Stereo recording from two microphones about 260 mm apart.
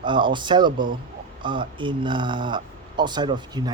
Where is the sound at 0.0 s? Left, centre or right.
Centre.